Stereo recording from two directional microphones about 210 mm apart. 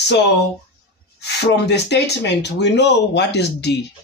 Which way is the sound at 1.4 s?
55° left (ahead or behind).